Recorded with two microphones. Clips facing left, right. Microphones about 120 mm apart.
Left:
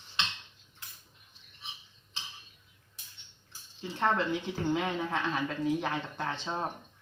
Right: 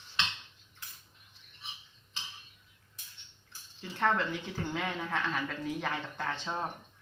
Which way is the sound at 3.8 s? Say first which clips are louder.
Left 1 dB; 20° left (ahead or behind).